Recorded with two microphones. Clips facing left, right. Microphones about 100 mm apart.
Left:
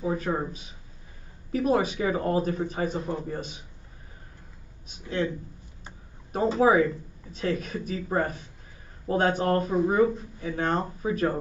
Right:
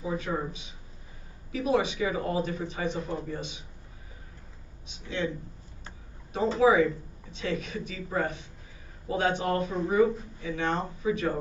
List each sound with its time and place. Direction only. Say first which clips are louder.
0.0 s a man's voice: left 3 dB; 40° left (ahead or behind)
4.8 s speech: left 3 dB; 45° left (ahead or behind)
6.6 s a man's voice: even; 40° left (ahead or behind)